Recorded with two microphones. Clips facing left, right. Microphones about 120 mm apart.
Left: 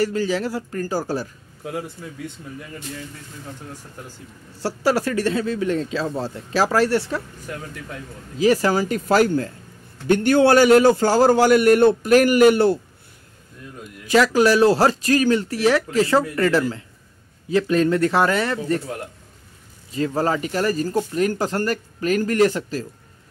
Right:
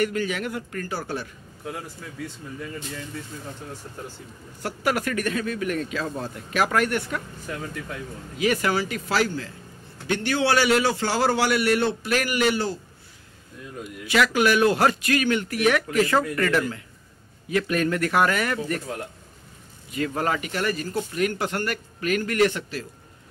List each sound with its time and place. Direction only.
0.0 s speech: 30° left (ahead or behind)
4.6 s a man's voice: 30° left (ahead or behind)
8.4 s a man's voice: 35° left (ahead or behind); by 12.7 s 55° left (ahead or behind)
14.0 s a man's voice: 35° left (ahead or behind)
19.9 s speech: 30° left (ahead or behind)